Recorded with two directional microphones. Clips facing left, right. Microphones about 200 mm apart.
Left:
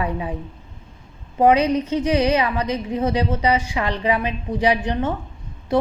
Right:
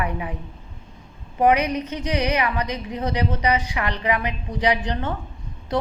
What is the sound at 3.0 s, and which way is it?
A woman's voice, 25° left (ahead or behind).